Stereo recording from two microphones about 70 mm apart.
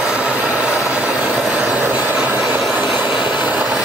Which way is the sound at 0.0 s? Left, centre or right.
Centre.